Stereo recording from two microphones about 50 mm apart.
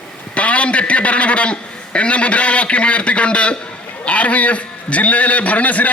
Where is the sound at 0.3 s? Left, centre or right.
Left.